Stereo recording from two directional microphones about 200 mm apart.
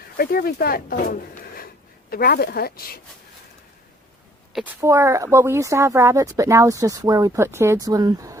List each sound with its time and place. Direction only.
0.2 s speech: 50° left (ahead or behind)
4.8 s speech: 15° right (ahead or behind)